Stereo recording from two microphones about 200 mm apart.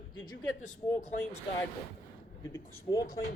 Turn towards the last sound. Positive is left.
turn(degrees=20)  # may be behind; listen again after turning